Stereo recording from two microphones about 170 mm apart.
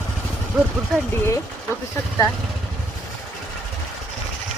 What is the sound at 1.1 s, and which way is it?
Speech, 15° left (ahead or behind).